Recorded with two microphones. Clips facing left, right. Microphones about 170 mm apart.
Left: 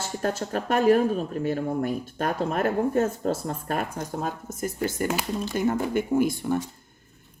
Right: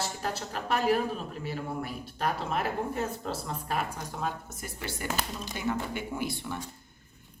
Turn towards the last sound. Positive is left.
turn(degrees=45)  # may be behind; listen again after turning